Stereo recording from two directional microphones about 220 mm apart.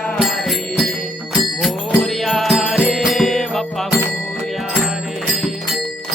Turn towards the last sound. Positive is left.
turn(degrees=0)  # may be behind; listen again after turning